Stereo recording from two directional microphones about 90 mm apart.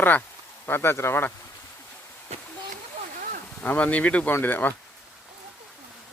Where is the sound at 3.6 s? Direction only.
15° left (ahead or behind).